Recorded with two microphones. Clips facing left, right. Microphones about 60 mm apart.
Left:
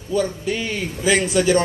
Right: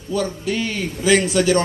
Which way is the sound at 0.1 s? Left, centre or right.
Left.